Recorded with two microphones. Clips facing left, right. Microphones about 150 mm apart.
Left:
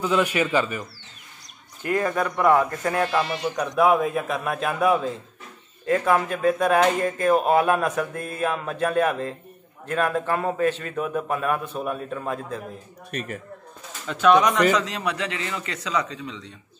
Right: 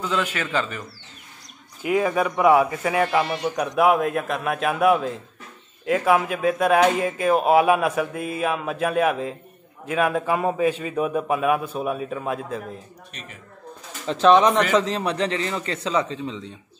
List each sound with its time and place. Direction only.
0.0 s a man's voice: 10° left (ahead or behind)
1.8 s a man's voice: 10° right (ahead or behind)
13.1 s speech: 55° left (ahead or behind)
14.0 s a man's voice: 30° right (ahead or behind)